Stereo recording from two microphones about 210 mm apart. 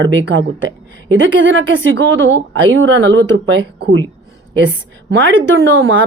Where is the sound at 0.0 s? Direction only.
60° right (ahead or behind).